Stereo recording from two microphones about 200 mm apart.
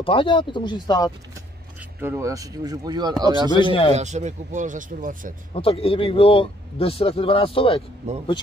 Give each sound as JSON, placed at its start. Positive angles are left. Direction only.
{"t": 0.0, "sound": "a man's voice", "side_deg": 25}
{"t": 2.0, "sound": "speech", "side_deg": -10}
{"t": 3.6, "sound": "a man's voice", "side_deg": 20}
{"t": 3.9, "sound": "speech", "side_deg": -35}
{"t": 5.5, "sound": "a man's voice", "side_deg": 25}
{"t": 8.0, "sound": "speech", "side_deg": -35}